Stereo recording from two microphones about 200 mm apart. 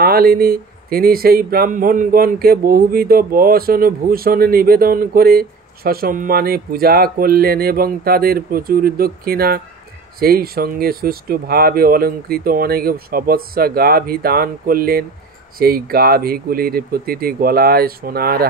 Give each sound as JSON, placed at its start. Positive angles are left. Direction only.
{"t": 0.0, "sound": "speech", "side_deg": -50}